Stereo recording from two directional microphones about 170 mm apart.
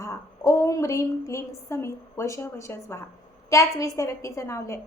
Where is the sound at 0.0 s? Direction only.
20° left (ahead or behind).